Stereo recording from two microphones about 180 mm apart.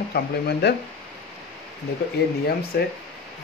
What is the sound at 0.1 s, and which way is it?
Speech, 65° left (ahead or behind).